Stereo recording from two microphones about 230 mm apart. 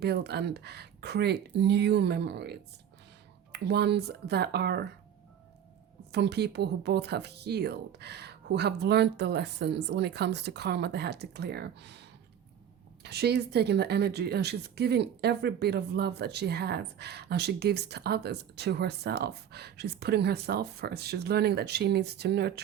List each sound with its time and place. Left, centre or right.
0.0 s speech: right
6.1 s speech: right